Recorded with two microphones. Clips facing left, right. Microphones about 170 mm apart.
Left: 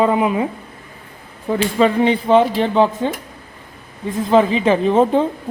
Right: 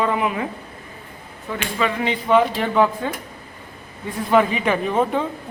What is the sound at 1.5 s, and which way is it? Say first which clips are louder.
Speech: left 8 dB; 35° left (ahead or behind).